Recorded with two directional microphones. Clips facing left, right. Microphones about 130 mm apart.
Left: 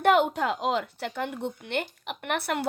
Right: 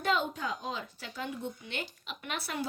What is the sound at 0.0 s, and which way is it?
Speech, 70° left (ahead or behind).